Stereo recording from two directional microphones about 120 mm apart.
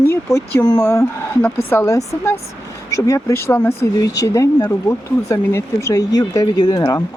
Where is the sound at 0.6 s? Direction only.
30° left (ahead or behind).